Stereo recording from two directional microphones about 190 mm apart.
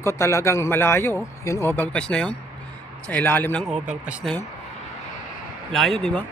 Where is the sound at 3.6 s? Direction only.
5° right (ahead or behind).